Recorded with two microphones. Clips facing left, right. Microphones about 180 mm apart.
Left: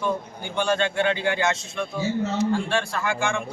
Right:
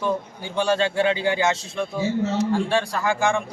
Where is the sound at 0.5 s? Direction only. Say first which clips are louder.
Right 2 dB; 35° right (ahead or behind).